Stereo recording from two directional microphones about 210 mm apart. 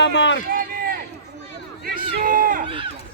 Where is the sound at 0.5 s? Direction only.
45° right (ahead or behind).